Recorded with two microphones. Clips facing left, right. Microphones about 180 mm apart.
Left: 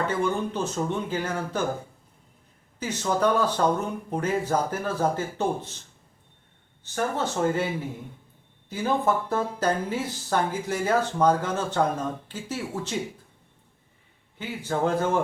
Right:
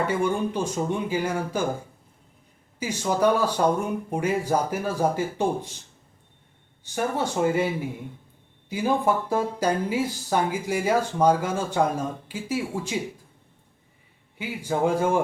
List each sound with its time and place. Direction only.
0.1 s speech: 10° right (ahead or behind)
2.7 s speech: 10° right (ahead or behind)
6.8 s speech: 10° right (ahead or behind)
8.7 s speech: 10° right (ahead or behind)
14.3 s speech: 10° right (ahead or behind)